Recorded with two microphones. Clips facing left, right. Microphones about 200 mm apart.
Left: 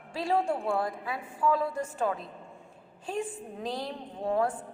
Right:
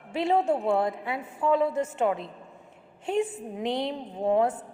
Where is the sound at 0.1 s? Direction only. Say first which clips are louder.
Right 4 dB; 20° right (ahead or behind).